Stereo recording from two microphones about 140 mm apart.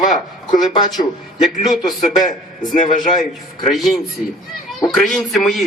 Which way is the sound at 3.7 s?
Centre (ahead or behind).